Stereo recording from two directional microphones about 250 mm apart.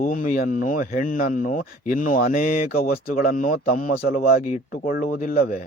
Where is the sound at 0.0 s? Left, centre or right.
Left.